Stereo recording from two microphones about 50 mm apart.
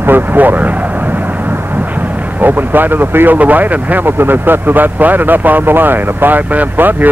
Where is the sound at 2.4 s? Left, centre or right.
Right.